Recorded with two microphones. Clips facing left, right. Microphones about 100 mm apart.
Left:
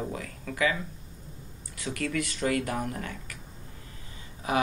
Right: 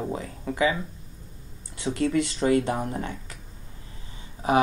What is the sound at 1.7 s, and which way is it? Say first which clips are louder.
Speech: right 7 dB; 25° right (ahead or behind).